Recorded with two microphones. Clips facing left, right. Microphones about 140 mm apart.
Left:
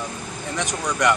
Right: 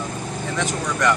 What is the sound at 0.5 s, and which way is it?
Speech, 20° left (ahead or behind).